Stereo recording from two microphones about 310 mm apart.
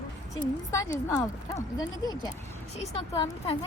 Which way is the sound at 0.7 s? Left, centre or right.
Centre.